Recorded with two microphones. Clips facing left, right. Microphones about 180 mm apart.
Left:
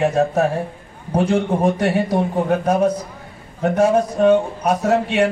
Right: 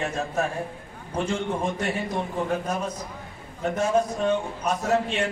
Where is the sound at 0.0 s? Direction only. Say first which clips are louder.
Left 10 dB; 65° left (ahead or behind).